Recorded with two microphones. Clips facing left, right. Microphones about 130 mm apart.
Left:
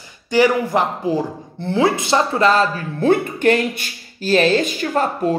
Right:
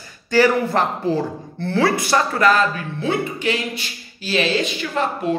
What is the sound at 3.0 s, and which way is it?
Speech, 50° left (ahead or behind).